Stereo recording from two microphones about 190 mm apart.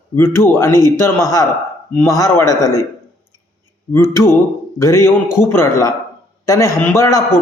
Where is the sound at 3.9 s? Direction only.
15° left (ahead or behind).